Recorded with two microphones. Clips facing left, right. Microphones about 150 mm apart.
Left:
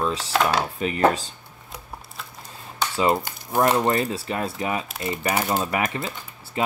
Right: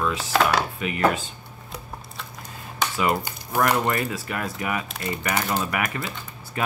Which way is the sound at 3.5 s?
25° left (ahead or behind).